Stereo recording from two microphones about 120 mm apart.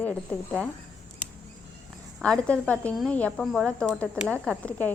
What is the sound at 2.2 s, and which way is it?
Speech, 10° left (ahead or behind).